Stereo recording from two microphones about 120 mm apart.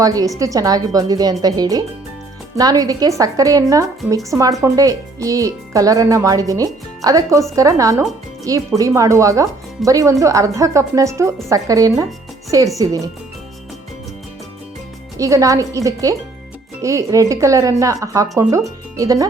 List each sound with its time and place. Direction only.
0.0 s a woman's voice: 30° right (ahead or behind)
15.2 s speech: 25° right (ahead or behind)